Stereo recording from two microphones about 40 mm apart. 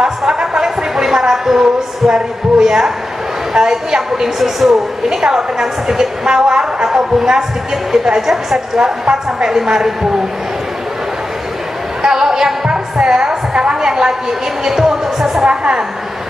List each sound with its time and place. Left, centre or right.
0.0 s a sound: centre
2.0 s a woman's voice: centre
8.7 s a woman's voice: centre
12.0 s music: centre
14.6 s a woman's voice: centre
15.4 s a woman's voice: right